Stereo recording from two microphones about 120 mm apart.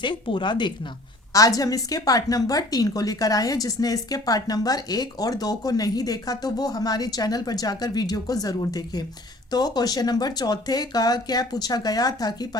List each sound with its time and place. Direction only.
0.0 s a woman's voice: 40° left (ahead or behind)
1.3 s a woman's voice: 30° left (ahead or behind)